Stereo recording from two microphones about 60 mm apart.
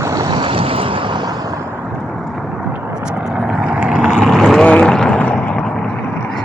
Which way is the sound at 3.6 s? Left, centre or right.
Centre.